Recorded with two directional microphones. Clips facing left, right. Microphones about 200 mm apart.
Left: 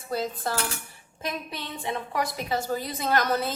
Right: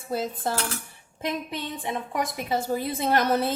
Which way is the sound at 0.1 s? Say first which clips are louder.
Right 1 dB; 25° right (ahead or behind).